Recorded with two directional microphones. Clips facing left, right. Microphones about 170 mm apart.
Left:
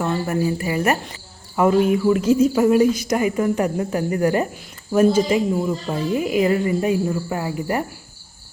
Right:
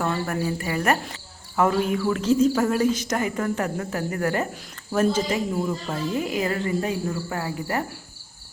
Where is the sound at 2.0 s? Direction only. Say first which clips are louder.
Left 4 dB; 10° left (ahead or behind).